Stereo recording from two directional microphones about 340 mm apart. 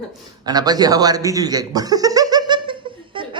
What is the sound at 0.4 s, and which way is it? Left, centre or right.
Chuckle, centre.